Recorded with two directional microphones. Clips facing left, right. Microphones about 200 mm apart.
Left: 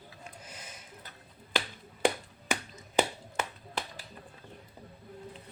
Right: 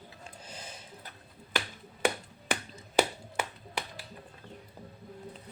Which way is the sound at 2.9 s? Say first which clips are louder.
Right 1 dB; 10° right (ahead or behind).